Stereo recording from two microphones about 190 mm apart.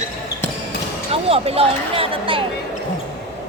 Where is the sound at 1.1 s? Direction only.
30° right (ahead or behind).